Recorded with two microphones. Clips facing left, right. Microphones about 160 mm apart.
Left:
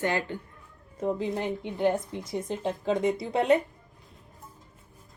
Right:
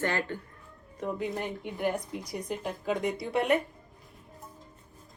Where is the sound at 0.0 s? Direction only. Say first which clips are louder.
Left 2 dB; 15° left (ahead or behind).